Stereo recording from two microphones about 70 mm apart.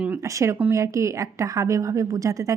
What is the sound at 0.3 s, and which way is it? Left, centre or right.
A woman's voice, right.